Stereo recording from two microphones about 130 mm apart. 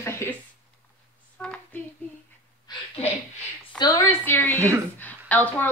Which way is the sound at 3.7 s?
30° left (ahead or behind).